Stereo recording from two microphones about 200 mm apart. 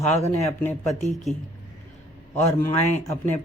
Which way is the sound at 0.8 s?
Centre (ahead or behind).